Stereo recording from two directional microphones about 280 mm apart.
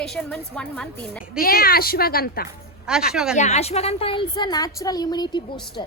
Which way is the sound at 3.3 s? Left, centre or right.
Left.